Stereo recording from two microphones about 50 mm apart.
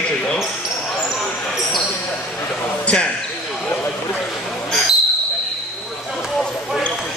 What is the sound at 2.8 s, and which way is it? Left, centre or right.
Speech, left.